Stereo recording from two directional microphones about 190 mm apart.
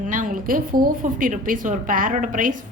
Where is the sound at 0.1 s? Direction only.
45° right (ahead or behind).